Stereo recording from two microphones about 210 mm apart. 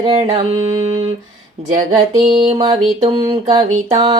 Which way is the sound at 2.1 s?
25° right (ahead or behind).